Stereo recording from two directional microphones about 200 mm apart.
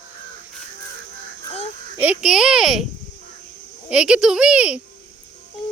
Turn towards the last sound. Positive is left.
turn(degrees=-5)  # may be behind; listen again after turning